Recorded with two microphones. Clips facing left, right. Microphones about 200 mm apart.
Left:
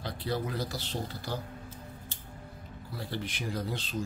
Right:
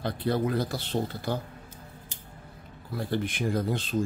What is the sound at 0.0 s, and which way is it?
Speech, 55° right (ahead or behind).